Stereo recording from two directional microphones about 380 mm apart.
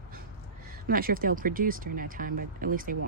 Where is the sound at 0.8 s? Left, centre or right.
Right.